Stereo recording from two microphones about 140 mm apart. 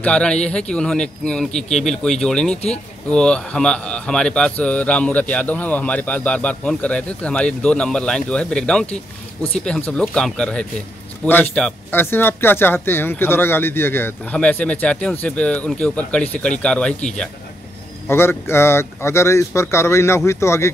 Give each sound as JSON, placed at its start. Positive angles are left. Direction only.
{"t": 0.0, "sound": "speech", "side_deg": 5}
{"t": 18.0, "sound": "speech", "side_deg": 15}